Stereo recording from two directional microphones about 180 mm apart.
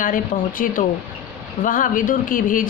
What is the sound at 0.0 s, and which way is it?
A woman's voice, 50° left (ahead or behind).